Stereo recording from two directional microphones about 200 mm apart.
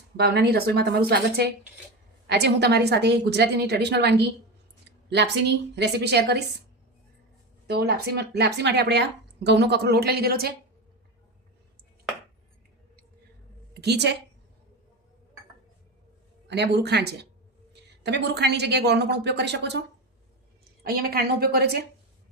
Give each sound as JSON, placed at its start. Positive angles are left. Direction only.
{"t": 0.2, "sound": "a woman's voice", "side_deg": -55}
{"t": 7.7, "sound": "speech", "side_deg": -50}
{"t": 13.7, "sound": "a woman's voice", "side_deg": -55}
{"t": 16.5, "sound": "speech", "side_deg": -55}
{"t": 20.8, "sound": "a woman's voice", "side_deg": -50}